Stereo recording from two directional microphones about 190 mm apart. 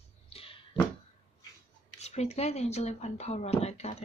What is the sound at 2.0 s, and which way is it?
Speech, 35° left (ahead or behind).